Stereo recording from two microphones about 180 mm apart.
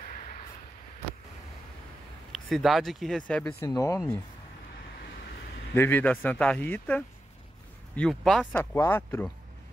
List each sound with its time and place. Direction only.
0.0 s vehicle: 50° left (ahead or behind)
2.3 s speech: centre (ahead or behind)
3.6 s speech: 20° left (ahead or behind)
5.8 s speech: 10° left (ahead or behind)
8.5 s speech: 10° left (ahead or behind)